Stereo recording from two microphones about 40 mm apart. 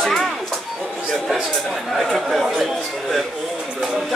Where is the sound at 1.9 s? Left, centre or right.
Centre.